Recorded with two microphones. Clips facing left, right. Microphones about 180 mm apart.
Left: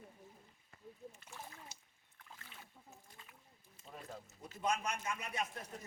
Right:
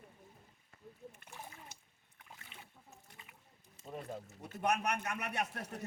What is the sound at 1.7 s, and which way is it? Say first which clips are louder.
Splash: right 2 dB; 55° right (ahead or behind).